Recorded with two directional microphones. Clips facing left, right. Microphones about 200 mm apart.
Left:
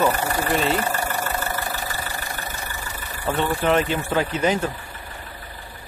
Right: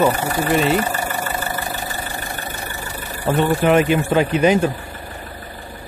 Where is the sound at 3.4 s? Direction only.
10° right (ahead or behind).